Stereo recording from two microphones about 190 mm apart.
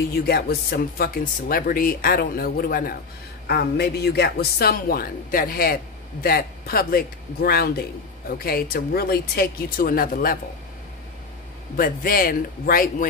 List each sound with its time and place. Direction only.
0.3 s a woman's voice: 55° left (ahead or behind)
11.7 s speech: 50° left (ahead or behind)